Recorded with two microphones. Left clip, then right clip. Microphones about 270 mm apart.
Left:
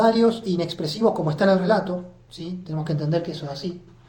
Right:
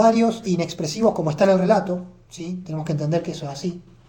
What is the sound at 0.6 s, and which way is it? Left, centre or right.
Speech, right.